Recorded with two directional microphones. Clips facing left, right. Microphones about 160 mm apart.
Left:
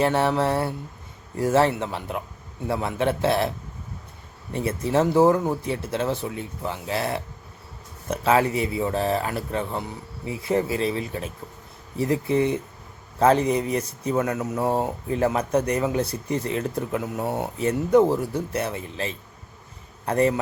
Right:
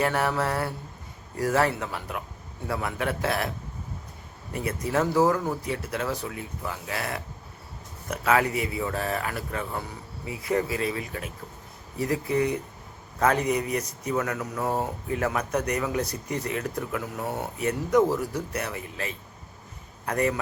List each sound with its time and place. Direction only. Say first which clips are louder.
0.0 s speech: left 4 dB; 25° left (ahead or behind)
4.5 s speech: left 4 dB; 25° left (ahead or behind)